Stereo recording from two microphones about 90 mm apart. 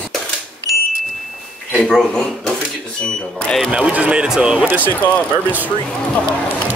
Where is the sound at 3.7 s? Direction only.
15° right (ahead or behind).